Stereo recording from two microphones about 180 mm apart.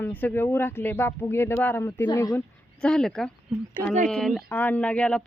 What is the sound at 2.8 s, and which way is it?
Speech, 5° left (ahead or behind).